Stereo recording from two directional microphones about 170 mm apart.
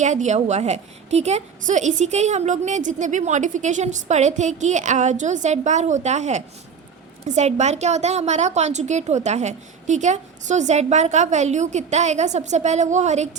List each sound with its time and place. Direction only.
0.0 s a woman's voice: 45° right (ahead or behind)